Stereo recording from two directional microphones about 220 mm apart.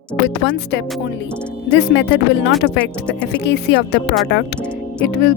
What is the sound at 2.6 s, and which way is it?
Speech, 5° left (ahead or behind).